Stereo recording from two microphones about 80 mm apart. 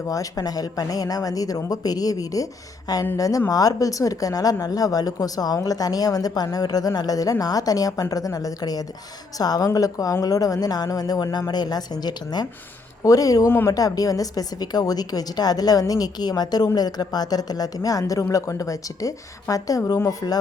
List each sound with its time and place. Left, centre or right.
0.1 s speech: left
13.0 s speech: left